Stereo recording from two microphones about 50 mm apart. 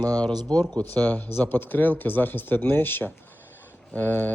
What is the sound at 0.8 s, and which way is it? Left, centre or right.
Speech, left.